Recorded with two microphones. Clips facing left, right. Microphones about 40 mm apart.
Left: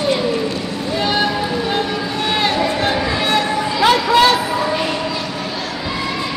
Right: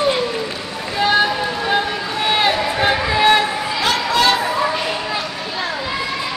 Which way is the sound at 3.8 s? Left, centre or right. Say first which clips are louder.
Left 5 dB; centre.